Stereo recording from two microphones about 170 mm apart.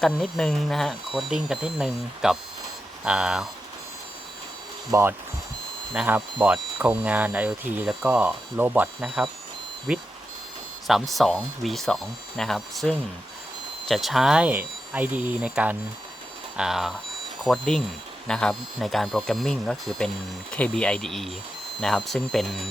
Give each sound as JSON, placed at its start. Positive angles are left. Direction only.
{"t": 0.0, "sound": "speech", "side_deg": 0}
{"t": 4.9, "sound": "speech", "side_deg": -15}